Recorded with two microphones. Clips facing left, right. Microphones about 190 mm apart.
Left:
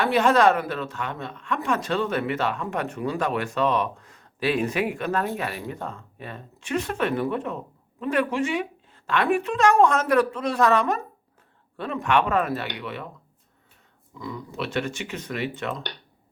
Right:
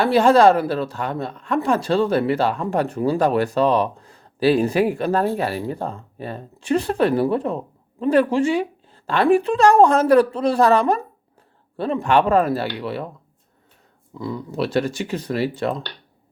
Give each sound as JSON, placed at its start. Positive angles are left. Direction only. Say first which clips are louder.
{"t": 0.0, "sound": "speech", "louder": "right 5 dB", "side_deg": -30}
{"t": 14.1, "sound": "speech", "louder": "right 7 dB", "side_deg": -30}